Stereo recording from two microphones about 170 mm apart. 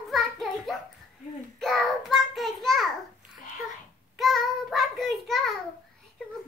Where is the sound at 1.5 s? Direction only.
Centre (ahead or behind).